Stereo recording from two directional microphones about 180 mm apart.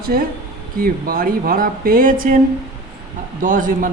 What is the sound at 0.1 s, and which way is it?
A man's voice, 55° right (ahead or behind).